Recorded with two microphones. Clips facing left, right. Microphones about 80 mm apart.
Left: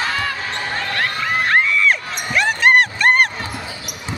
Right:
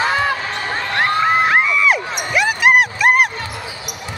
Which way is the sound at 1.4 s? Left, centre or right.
Centre.